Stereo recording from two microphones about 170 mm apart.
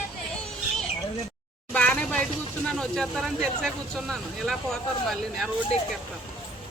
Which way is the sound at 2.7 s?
5° left (ahead or behind).